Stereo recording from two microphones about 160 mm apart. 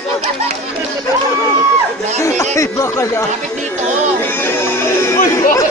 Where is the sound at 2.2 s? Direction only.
20° left (ahead or behind).